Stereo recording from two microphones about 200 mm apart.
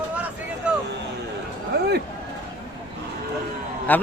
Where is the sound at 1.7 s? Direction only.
55° right (ahead or behind).